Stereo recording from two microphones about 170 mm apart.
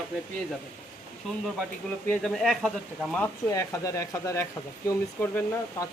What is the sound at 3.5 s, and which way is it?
Speech, 15° left (ahead or behind).